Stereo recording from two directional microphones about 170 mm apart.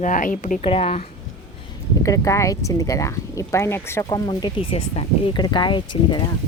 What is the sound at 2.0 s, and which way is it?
Speech, 20° left (ahead or behind).